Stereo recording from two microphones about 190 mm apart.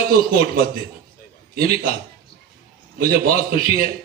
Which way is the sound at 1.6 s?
50° right (ahead or behind).